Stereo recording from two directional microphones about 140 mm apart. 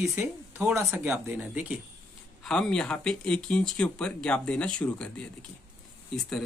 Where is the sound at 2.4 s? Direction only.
5° left (ahead or behind).